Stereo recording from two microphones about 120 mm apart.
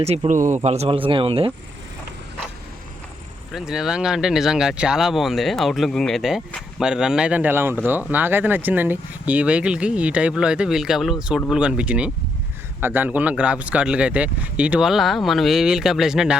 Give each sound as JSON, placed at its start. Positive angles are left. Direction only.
{"t": 0.0, "sound": "speech", "side_deg": -60}
{"t": 3.5, "sound": "speech", "side_deg": -5}